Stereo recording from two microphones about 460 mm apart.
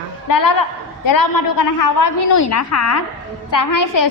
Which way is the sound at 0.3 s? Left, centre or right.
Left.